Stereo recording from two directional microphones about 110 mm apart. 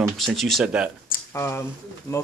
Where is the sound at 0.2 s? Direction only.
Centre (ahead or behind).